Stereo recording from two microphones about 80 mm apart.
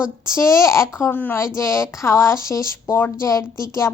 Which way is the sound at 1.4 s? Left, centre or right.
Left.